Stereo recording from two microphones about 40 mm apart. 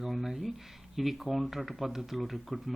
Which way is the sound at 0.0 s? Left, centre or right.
Centre.